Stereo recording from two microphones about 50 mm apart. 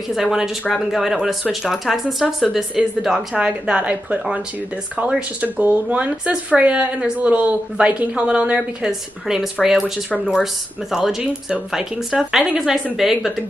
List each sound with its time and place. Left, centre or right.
0.1 s speech: centre
0.7 s speech: centre
3.3 s a woman's voice: right
5.4 s a woman's voice: right; by 13.3 s centre